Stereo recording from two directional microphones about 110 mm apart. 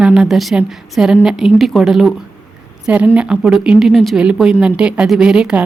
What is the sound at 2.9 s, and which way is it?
Speech, 10° right (ahead or behind).